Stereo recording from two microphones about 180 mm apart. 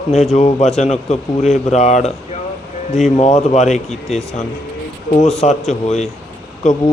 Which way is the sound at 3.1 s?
35° left (ahead or behind).